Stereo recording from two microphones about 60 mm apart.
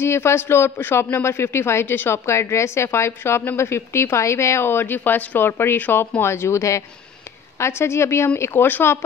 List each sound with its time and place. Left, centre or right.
0.0 s a woman's voice: left
5.5 s a woman's voice: left
8.4 s speech: left